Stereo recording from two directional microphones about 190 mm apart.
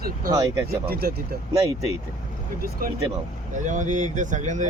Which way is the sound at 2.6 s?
50° right (ahead or behind).